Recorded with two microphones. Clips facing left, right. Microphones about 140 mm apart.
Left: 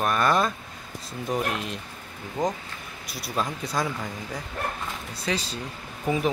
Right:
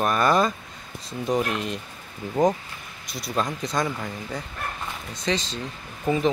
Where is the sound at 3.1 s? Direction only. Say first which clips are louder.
Right 2 dB; 5° left (ahead or behind).